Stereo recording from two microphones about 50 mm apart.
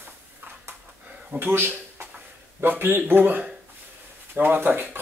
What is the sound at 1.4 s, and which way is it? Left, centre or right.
Speech, right.